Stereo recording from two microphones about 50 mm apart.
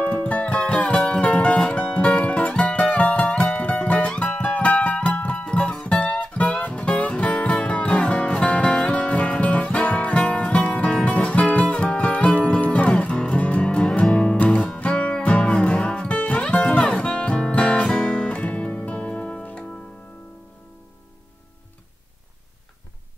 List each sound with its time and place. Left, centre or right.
0.0 s music: left